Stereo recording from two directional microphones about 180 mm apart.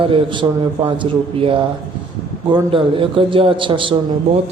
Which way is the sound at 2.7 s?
30° right (ahead or behind).